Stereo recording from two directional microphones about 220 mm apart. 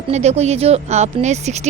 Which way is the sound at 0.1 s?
30° right (ahead or behind).